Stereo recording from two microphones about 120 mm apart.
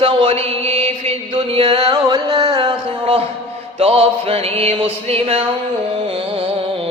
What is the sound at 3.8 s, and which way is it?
Music, 55° right (ahead or behind).